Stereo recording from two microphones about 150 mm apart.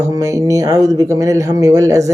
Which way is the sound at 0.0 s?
20° right (ahead or behind).